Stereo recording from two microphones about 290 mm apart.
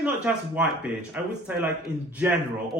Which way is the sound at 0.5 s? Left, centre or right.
Centre.